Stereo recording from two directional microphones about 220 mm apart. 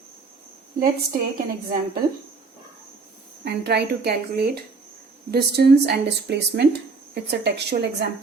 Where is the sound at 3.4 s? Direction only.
50° right (ahead or behind).